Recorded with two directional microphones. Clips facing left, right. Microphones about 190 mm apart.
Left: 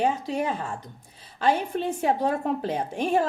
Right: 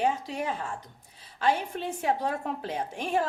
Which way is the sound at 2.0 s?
35° left (ahead or behind).